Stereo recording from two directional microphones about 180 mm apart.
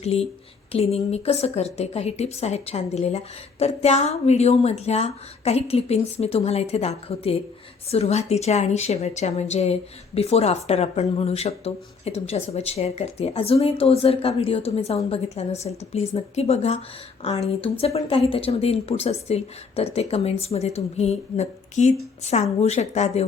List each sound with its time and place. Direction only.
0.0 s speech: 35° left (ahead or behind)